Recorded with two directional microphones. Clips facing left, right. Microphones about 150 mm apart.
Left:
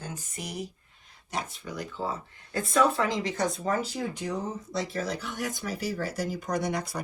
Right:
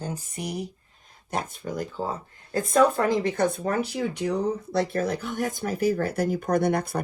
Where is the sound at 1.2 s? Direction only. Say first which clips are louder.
Right 5 dB; 50° right (ahead or behind).